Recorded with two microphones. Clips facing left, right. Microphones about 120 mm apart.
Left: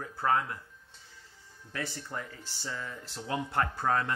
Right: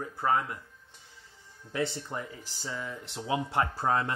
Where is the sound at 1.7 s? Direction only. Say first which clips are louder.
Right 6 dB; 25° right (ahead or behind).